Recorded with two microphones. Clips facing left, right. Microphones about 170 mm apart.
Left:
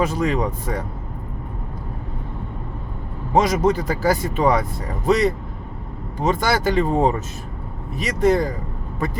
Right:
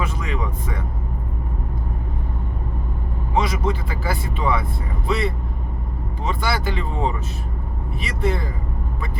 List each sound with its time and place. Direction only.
0.0 s speech: 40° left (ahead or behind)
3.3 s speech: 45° left (ahead or behind)